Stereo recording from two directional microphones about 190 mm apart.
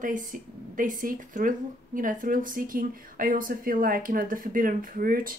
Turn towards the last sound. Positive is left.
turn(degrees=-50)  # may be behind; listen again after turning